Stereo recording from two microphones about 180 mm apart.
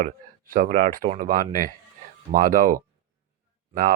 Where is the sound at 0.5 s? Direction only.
45° right (ahead or behind).